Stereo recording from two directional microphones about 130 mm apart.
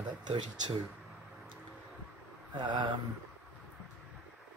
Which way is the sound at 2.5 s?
35° right (ahead or behind).